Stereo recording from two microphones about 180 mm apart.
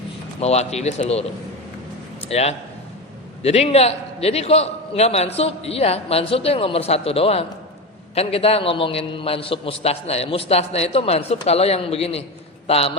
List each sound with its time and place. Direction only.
0.3 s a man's voice: 35° left (ahead or behind)
2.3 s a man's voice: 35° left (ahead or behind)